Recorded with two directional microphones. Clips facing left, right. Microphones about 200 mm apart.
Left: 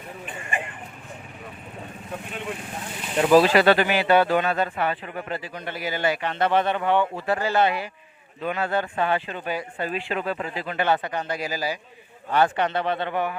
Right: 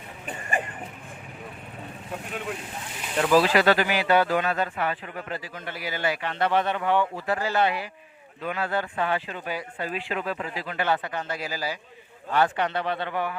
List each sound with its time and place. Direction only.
3.2 s a man's voice: 25° left (ahead or behind)
12.3 s speech: 25° left (ahead or behind)